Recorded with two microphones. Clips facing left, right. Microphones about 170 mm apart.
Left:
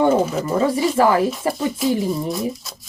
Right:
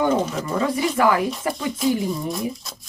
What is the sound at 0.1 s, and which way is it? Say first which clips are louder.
Speech: left 4 dB; 5° left (ahead or behind).